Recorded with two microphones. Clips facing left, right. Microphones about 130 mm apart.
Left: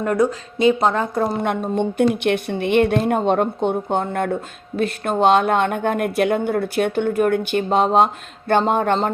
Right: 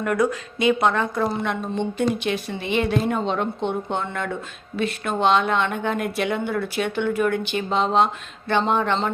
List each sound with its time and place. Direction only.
0.0 s a woman's voice: 30° left (ahead or behind)